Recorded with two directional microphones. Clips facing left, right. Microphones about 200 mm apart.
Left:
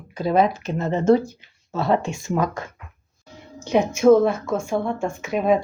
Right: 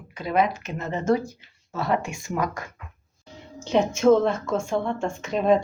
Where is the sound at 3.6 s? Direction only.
10° left (ahead or behind).